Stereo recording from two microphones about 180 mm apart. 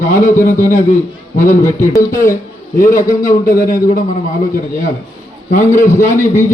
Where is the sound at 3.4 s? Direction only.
55° left (ahead or behind).